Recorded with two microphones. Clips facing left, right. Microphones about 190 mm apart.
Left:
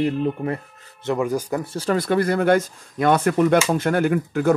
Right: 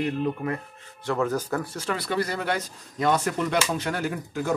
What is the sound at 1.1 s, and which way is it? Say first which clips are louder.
Speech: left 3 dB; 15° left (ahead or behind).